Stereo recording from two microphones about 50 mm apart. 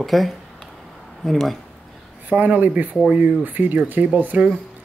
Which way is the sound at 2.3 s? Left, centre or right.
Right.